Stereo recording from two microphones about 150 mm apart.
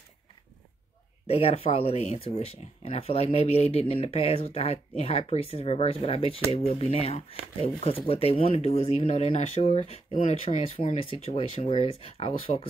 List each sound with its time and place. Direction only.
1.2 s speech: 40° left (ahead or behind)